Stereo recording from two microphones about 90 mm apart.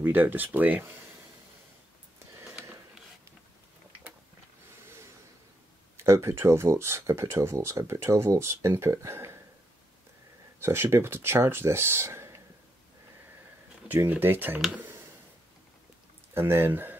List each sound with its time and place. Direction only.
0.0 s speech: 20° right (ahead or behind)
5.9 s speech: 30° right (ahead or behind)
10.6 s speech: 30° right (ahead or behind)
13.8 s speech: 20° right (ahead or behind)
16.3 s speech: 25° right (ahead or behind)